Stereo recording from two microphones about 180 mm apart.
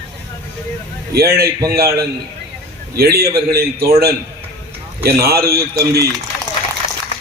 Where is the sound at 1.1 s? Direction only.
60° right (ahead or behind).